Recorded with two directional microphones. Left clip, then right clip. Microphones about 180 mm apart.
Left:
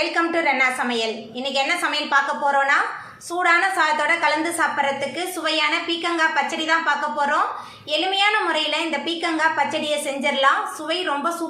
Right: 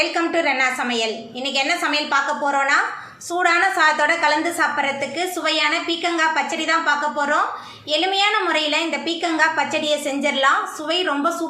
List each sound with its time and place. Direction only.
0.0 s a woman's voice: 15° right (ahead or behind)